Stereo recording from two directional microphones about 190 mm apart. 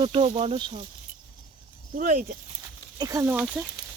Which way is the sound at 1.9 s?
40° right (ahead or behind).